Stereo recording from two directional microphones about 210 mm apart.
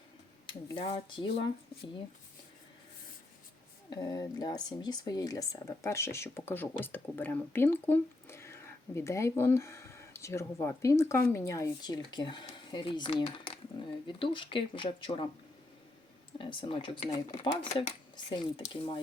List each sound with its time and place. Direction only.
0.4 s speech: 25° left (ahead or behind)
3.8 s speech: 20° left (ahead or behind)
16.4 s speech: 25° left (ahead or behind)